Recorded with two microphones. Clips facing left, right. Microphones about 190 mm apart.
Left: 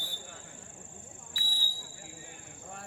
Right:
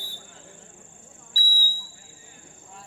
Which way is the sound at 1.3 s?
35° right (ahead or behind).